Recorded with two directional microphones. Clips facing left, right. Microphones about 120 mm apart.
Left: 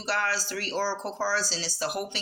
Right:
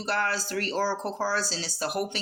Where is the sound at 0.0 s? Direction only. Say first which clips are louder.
Right 1 dB; 45° right (ahead or behind).